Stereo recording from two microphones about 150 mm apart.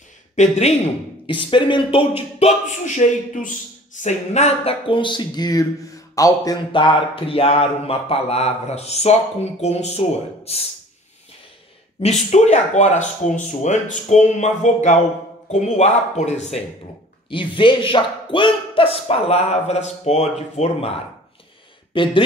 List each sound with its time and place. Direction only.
0.4 s speech: 45° left (ahead or behind)
1.2 s speech: 35° left (ahead or behind)
12.0 s speech: 50° left (ahead or behind)
17.3 s speech: 35° left (ahead or behind)
21.9 s speech: 35° left (ahead or behind)